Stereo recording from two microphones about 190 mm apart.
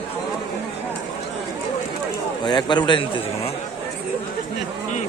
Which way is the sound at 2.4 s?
25° left (ahead or behind).